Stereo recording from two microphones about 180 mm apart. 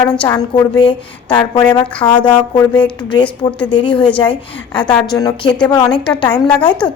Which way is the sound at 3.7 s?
25° left (ahead or behind).